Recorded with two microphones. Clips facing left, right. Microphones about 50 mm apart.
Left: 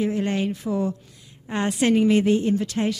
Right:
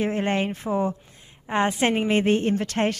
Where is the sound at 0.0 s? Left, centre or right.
Right.